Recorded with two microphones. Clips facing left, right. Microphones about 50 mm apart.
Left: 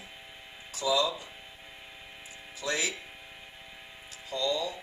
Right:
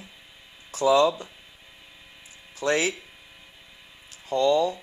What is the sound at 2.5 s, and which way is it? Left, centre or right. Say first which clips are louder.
Speech: right 8 dB; right.